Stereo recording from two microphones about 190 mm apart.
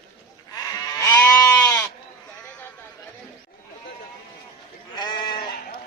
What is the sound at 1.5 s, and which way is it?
Goat, 10° left (ahead or behind).